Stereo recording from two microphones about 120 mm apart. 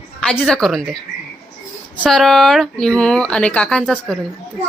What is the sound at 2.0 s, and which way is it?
Speech, 5° left (ahead or behind).